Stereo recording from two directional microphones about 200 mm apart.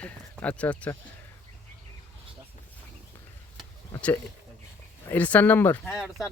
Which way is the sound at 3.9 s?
5° left (ahead or behind).